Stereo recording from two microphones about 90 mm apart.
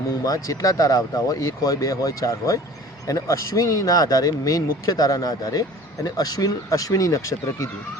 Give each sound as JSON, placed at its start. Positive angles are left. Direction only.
{"t": 0.3, "sound": "speech", "side_deg": 40}